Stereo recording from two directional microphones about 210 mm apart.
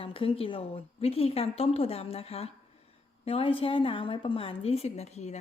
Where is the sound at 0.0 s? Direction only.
25° left (ahead or behind).